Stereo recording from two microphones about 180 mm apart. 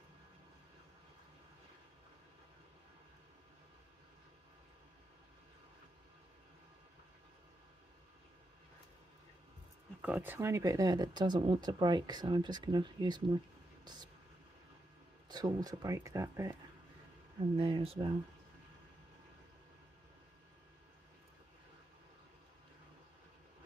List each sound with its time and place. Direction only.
10.0 s speech: 10° right (ahead or behind)
15.2 s speech: 20° right (ahead or behind)
17.6 s speech: 30° right (ahead or behind)